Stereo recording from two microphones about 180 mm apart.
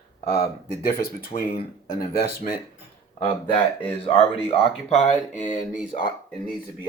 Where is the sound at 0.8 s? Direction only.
55° left (ahead or behind).